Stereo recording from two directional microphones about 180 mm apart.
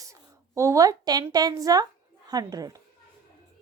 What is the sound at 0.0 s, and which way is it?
Speech, 15° right (ahead or behind).